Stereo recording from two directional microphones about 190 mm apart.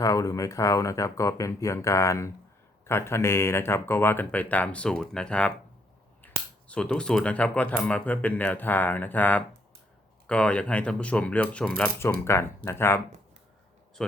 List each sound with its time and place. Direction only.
0.0 s speech: 20° left (ahead or behind)